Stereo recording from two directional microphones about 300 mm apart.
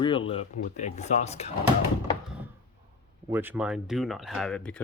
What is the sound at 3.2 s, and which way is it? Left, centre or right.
Speech, centre.